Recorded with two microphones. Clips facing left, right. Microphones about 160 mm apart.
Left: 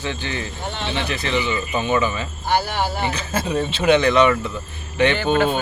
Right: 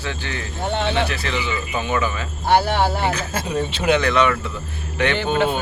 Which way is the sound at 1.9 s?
10° left (ahead or behind).